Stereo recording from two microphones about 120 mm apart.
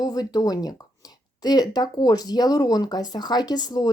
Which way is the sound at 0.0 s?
35° left (ahead or behind).